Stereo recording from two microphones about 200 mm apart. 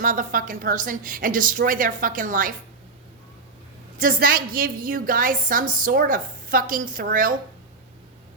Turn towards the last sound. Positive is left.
turn(degrees=-45)  # may be behind; listen again after turning